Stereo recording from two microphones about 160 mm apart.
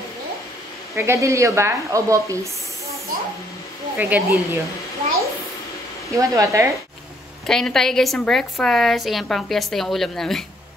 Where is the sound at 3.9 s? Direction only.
10° right (ahead or behind).